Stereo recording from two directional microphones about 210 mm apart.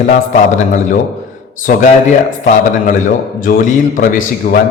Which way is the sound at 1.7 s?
40° left (ahead or behind).